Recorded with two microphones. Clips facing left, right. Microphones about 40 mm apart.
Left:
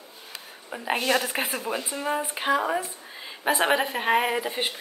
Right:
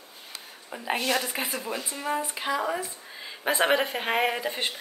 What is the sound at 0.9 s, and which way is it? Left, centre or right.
A woman's voice, left.